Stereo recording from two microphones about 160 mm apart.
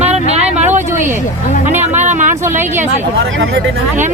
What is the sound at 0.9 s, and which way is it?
Speech, 15° right (ahead or behind).